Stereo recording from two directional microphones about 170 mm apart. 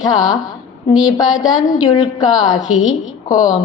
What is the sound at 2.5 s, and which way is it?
Speech, 5° right (ahead or behind).